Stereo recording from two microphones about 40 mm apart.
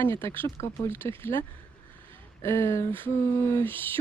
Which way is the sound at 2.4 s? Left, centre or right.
Left.